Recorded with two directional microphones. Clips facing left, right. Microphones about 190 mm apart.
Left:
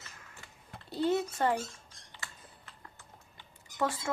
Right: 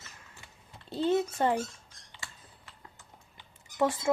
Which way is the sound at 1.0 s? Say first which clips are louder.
Right 2 dB; 20° right (ahead or behind).